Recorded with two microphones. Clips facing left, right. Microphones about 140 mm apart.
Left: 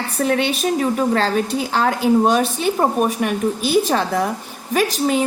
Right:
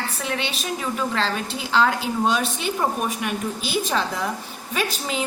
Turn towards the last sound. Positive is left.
turn(degrees=50)  # may be behind; listen again after turning